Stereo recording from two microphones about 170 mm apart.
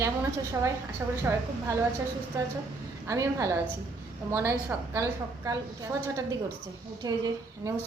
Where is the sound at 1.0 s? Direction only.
15° right (ahead or behind).